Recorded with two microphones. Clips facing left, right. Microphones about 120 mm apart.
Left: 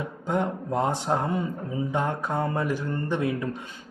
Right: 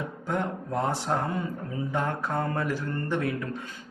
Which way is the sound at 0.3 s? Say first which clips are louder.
Left 4 dB; 20° left (ahead or behind).